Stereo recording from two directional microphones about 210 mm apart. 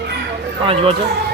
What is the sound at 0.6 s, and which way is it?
Speech, 25° right (ahead or behind).